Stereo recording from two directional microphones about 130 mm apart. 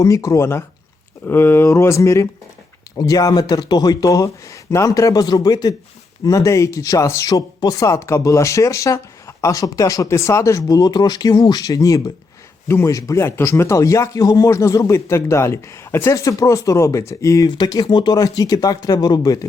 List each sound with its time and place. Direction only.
0.0 s a man's voice: 25° left (ahead or behind)